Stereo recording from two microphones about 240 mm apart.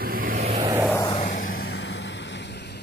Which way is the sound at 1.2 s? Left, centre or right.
Left.